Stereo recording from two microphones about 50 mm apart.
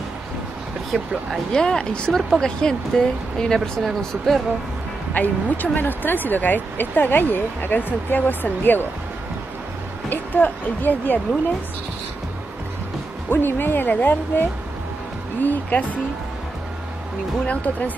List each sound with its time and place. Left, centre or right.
0.9 s speech: centre
1.5 s speech: centre
5.1 s speech: left
10.0 s speech: left
13.3 s speech: left
17.5 s speech: left